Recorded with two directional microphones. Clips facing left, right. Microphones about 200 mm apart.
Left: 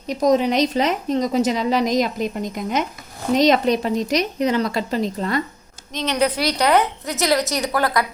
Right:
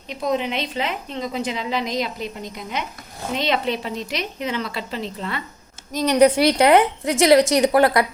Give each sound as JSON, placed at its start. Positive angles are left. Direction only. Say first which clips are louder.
{"t": 0.1, "sound": "a woman's voice", "louder": "left 6 dB", "side_deg": 40}
{"t": 5.9, "sound": "a woman's voice", "louder": "right 4 dB", "side_deg": -10}
{"t": 6.6, "sound": "a woman's voice", "louder": "right 1 dB", "side_deg": -25}